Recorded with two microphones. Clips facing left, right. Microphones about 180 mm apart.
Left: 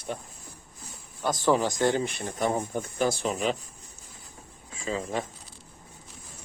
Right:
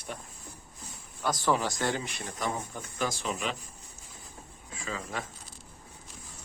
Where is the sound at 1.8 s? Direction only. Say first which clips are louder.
Left 7 dB; 25° left (ahead or behind).